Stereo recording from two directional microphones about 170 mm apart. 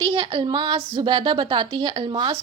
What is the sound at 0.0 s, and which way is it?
A woman's voice, 30° right (ahead or behind).